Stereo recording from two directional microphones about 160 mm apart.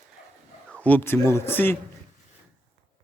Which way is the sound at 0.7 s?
10° left (ahead or behind).